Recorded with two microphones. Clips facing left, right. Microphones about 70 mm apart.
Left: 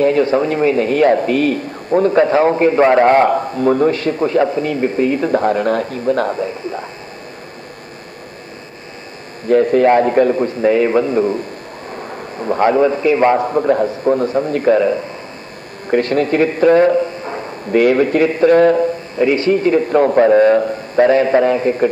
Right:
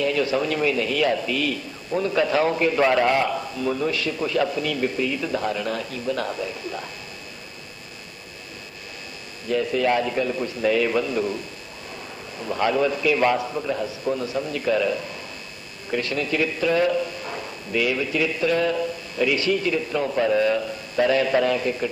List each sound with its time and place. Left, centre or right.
0.0 s a man's voice: left
9.5 s a man's voice: left